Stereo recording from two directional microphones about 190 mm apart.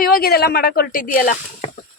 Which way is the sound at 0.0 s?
55° left (ahead or behind).